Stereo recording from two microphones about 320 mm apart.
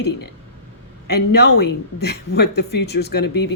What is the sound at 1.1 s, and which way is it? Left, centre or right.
A woman's voice, left.